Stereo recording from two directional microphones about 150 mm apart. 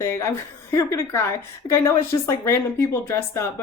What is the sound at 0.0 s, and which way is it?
A woman's voice, 20° left (ahead or behind).